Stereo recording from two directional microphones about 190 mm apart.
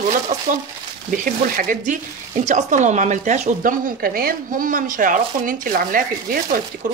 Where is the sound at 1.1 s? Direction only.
45° right (ahead or behind).